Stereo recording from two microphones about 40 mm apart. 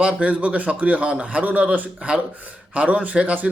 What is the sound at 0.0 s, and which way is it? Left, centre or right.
Speech, right.